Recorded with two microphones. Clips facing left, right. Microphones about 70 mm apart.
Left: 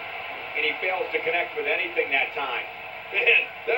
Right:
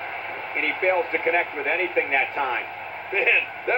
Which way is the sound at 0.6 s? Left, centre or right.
Right.